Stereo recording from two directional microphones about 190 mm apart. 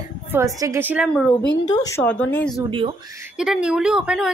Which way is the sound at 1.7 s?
20° left (ahead or behind).